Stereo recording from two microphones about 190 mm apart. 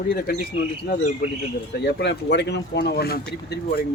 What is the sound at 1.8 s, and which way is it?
Speech, 65° left (ahead or behind).